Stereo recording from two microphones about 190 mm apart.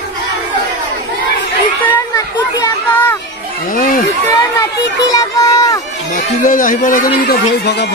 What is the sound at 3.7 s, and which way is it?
Speech, 45° left (ahead or behind).